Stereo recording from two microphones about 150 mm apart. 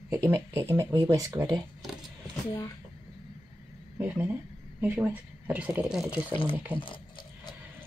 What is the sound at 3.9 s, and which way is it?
Speech, 10° right (ahead or behind).